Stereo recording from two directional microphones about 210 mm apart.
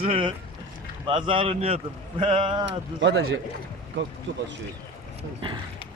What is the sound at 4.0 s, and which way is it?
Speech, 60° right (ahead or behind).